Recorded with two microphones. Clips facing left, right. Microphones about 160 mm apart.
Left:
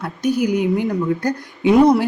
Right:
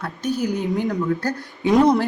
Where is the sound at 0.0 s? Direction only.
10° left (ahead or behind).